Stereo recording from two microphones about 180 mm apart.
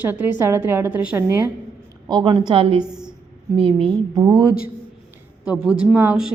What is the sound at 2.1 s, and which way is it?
Speech, 25° right (ahead or behind).